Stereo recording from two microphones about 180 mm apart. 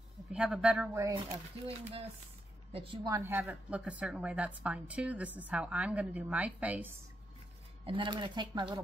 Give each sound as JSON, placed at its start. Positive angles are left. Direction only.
{"t": 0.3, "sound": "a man's voice", "side_deg": -5}
{"t": 0.9, "sound": "a woman's voice", "side_deg": -15}
{"t": 2.7, "sound": "speech", "side_deg": -30}
{"t": 3.1, "sound": "a woman's voice", "side_deg": -15}
{"t": 7.8, "sound": "speech", "side_deg": -25}